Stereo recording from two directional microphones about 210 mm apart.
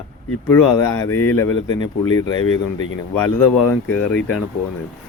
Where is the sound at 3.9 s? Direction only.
5° left (ahead or behind).